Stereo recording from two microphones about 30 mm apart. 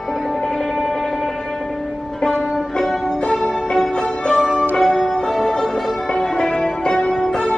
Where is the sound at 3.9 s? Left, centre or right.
Left.